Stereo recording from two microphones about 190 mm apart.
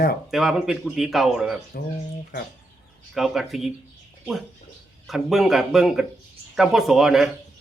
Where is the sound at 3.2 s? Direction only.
Centre (ahead or behind).